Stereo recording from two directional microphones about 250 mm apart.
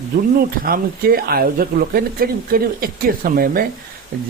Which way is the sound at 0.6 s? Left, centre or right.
Right.